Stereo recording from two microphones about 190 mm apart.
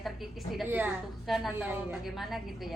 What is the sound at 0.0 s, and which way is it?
A child's voice, centre (ahead or behind).